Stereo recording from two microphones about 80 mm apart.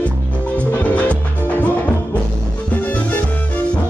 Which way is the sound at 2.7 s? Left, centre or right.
Left.